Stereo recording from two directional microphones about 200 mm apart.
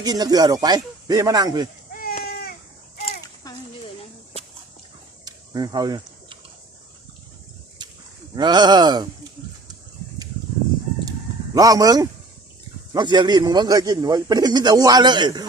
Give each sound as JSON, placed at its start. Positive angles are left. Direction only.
{"t": 0.0, "sound": "a man's voice", "side_deg": -20}
{"t": 1.9, "sound": "a sound", "side_deg": 45}
{"t": 3.4, "sound": "a sound", "side_deg": 15}
{"t": 5.2, "sound": "typing", "side_deg": -20}
{"t": 8.4, "sound": "a man's voice", "side_deg": -20}
{"t": 11.5, "sound": "a man's voice", "side_deg": -20}